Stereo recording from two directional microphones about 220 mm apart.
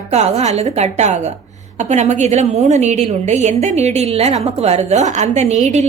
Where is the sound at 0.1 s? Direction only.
30° right (ahead or behind).